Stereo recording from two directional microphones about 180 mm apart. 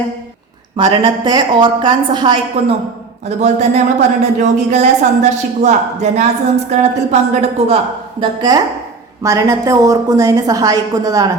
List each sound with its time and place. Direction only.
0.8 s a woman's voice: 30° right (ahead or behind)
3.2 s a woman's voice: 40° right (ahead or behind)
8.2 s a woman's voice: 20° right (ahead or behind)